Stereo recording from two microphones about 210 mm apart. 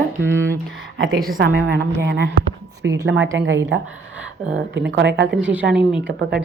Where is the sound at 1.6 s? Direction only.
55° right (ahead or behind).